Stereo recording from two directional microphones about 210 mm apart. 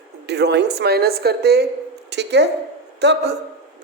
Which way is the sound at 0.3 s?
55° right (ahead or behind).